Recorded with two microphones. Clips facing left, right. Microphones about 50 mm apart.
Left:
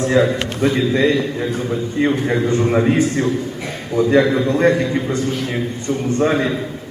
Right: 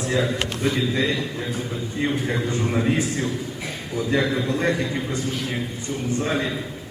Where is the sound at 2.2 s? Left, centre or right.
Centre.